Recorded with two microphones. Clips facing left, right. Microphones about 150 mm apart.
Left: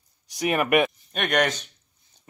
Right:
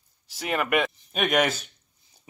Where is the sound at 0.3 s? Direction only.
15° left (ahead or behind).